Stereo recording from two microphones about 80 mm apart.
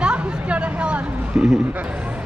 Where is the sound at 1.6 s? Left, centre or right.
Centre.